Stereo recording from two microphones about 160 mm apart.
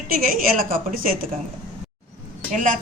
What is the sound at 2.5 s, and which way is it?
Speech, 55° right (ahead or behind).